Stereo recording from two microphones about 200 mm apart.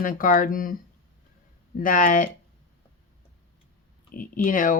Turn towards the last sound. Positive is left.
turn(degrees=40)  # may be behind; listen again after turning